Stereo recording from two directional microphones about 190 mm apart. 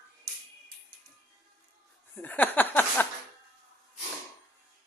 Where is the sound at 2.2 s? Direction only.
10° left (ahead or behind).